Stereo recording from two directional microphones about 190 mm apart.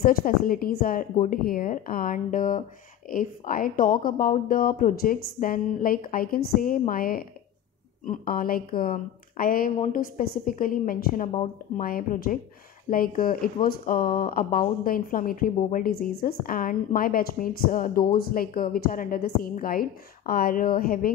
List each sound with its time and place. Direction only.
0.0 s speech: 50° left (ahead or behind)